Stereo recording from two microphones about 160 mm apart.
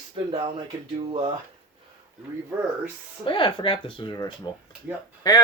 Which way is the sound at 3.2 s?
30° left (ahead or behind).